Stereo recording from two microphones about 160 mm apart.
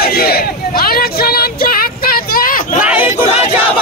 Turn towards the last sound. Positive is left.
turn(degrees=-10)  # may be behind; listen again after turning